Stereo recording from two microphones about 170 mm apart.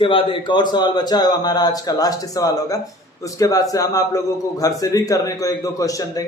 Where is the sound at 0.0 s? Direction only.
30° left (ahead or behind).